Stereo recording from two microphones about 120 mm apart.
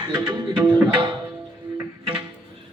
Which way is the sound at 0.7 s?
40° right (ahead or behind).